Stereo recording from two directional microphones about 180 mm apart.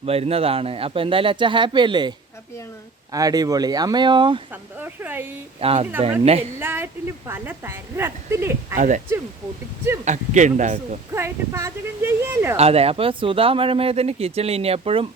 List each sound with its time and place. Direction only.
0.0 s speech: 35° right (ahead or behind)
4.8 s a woman's voice: 10° right (ahead or behind)
5.5 s speech: 30° right (ahead or behind)
6.6 s a woman's voice: 15° right (ahead or behind)
10.0 s speech: 40° right (ahead or behind)
11.1 s a woman's voice: 15° right (ahead or behind)
12.5 s speech: 35° right (ahead or behind)